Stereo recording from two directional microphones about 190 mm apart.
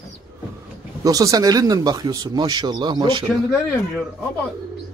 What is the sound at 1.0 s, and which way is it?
Speech, 20° right (ahead or behind).